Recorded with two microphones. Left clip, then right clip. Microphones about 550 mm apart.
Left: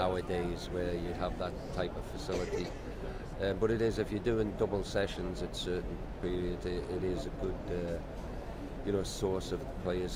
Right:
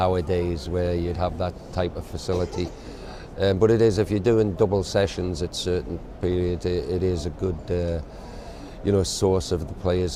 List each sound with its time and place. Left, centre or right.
0.0 s speech: right
3.4 s speech: right
8.9 s speech: right